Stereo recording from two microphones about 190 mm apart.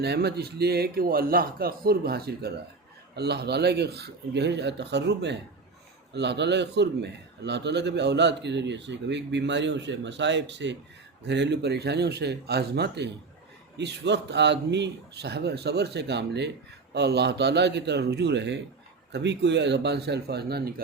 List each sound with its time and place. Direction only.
0.0 s a man's voice: 60° right (ahead or behind)